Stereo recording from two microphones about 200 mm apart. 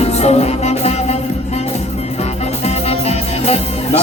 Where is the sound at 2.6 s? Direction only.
30° left (ahead or behind).